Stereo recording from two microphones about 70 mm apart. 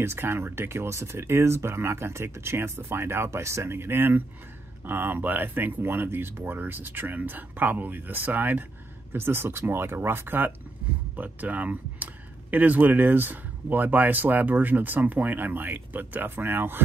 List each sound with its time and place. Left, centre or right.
0.0 s speech: right